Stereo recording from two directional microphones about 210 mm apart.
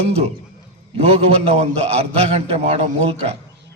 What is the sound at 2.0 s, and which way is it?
A man's voice, 30° right (ahead or behind).